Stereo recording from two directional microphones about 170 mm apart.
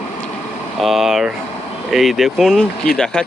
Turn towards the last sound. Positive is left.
turn(degrees=5)  # may be behind; listen again after turning